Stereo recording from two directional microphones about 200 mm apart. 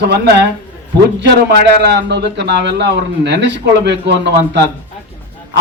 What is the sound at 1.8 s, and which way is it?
A man's voice, 60° right (ahead or behind).